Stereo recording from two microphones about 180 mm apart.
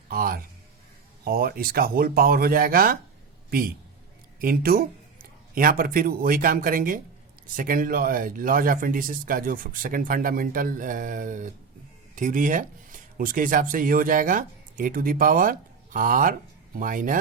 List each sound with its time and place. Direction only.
0.1 s speech: 55° right (ahead or behind)
4.4 s speech: 55° right (ahead or behind)